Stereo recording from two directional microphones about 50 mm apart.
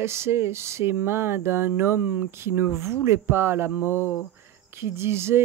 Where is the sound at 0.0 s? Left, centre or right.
Right.